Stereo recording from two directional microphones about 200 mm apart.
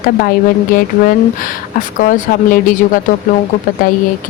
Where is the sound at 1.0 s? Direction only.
45° left (ahead or behind).